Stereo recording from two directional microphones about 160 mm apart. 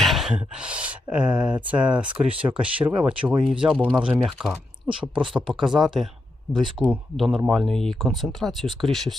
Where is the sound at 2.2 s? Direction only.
35° right (ahead or behind).